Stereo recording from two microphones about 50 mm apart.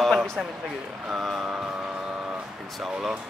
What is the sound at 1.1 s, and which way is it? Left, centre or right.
Speech, centre.